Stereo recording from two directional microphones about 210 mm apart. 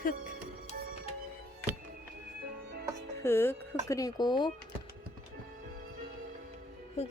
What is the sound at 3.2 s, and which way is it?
Speech, 10° left (ahead or behind).